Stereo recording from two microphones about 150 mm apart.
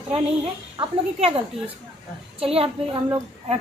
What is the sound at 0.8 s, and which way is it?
Speech, 40° right (ahead or behind).